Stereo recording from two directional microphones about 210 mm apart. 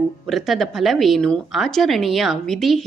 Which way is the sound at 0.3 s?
Centre (ahead or behind).